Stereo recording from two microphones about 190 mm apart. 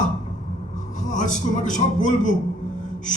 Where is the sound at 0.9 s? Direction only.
40° left (ahead or behind).